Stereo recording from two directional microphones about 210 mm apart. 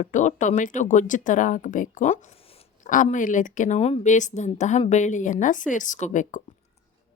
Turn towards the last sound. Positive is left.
turn(degrees=35)  # may be behind; listen again after turning